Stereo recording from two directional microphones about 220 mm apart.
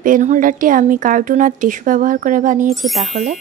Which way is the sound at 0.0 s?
35° right (ahead or behind).